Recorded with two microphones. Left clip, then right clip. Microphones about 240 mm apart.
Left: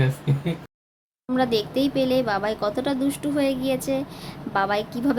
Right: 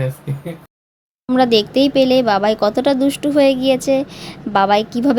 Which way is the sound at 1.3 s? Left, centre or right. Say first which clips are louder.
Right 9 dB; right.